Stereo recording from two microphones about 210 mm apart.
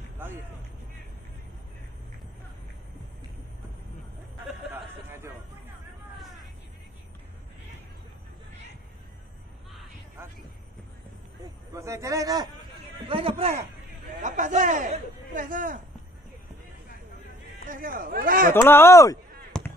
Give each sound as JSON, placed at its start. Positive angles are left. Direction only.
{"t": 4.5, "sound": "a sound", "side_deg": -10}
{"t": 11.7, "sound": "speech", "side_deg": -15}
{"t": 13.1, "sound": "a man's voice", "side_deg": -25}
{"t": 17.6, "sound": "speech", "side_deg": -40}
{"t": 18.5, "sound": "speech", "side_deg": 10}
{"t": 19.5, "sound": "chop", "side_deg": 5}